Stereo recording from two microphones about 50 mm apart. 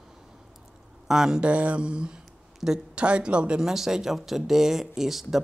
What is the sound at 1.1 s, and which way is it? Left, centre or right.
Speech, centre.